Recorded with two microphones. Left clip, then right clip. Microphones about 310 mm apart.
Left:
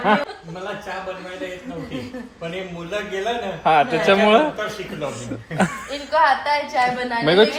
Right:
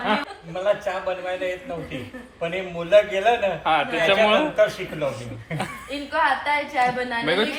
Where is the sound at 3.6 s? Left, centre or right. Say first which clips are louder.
Left 6 dB; left.